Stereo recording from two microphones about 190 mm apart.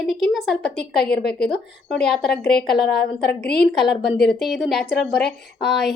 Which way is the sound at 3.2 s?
55° left (ahead or behind).